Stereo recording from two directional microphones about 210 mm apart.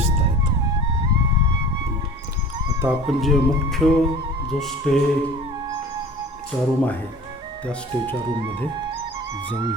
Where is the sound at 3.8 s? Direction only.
Centre (ahead or behind).